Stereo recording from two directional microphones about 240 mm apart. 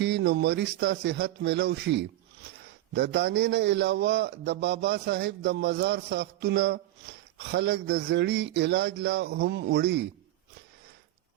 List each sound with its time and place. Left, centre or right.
0.0 s a man's voice: right